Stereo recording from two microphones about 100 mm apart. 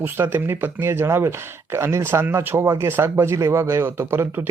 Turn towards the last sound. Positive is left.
turn(degrees=-25)  # may be behind; listen again after turning